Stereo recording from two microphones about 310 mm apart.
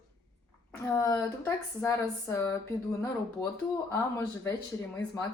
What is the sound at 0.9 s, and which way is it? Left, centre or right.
Speech, centre.